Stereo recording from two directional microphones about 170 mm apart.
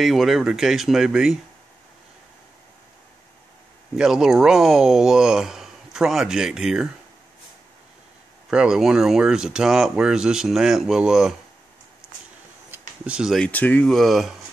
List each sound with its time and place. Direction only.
0.0 s speech: centre (ahead or behind)
3.9 s speech: 5° right (ahead or behind)
8.5 s speech: 5° right (ahead or behind)
12.0 s a sound: 15° left (ahead or behind)
12.7 s speech: 5° right (ahead or behind)